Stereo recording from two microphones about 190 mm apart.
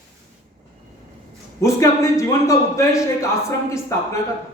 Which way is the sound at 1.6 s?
15° left (ahead or behind).